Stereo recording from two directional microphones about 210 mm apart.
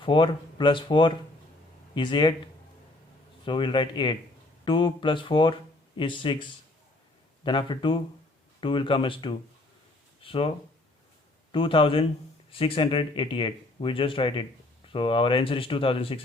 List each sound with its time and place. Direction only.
0.0 s speech: 25° left (ahead or behind)
3.4 s speech: 25° left (ahead or behind)
11.5 s speech: 25° left (ahead or behind)